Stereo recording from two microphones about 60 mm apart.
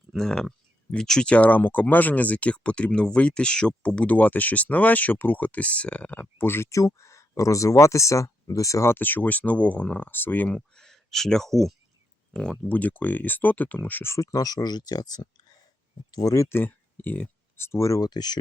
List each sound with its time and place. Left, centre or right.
0.2 s speech: centre
1.3 s speech: left
6.4 s speech: left
6.7 s speech: left
9.0 s speech: left
10.5 s speech: centre; by 14.0 s left
14.2 s speech: left
16.1 s speech: left
16.5 s speech: left
17.6 s speech: left